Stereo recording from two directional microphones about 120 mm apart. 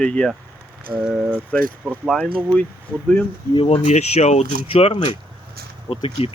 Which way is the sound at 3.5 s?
50° left (ahead or behind).